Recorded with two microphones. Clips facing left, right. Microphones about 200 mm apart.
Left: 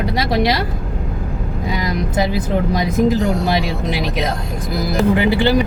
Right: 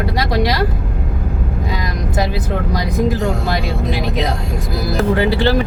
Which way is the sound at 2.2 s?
20° left (ahead or behind).